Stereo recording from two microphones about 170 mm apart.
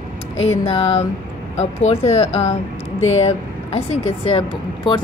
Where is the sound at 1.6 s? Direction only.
40° left (ahead or behind).